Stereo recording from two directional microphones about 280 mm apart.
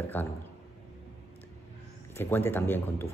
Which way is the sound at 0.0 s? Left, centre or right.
Centre.